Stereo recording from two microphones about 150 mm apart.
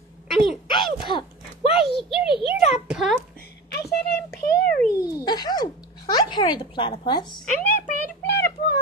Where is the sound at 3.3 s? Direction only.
90° left.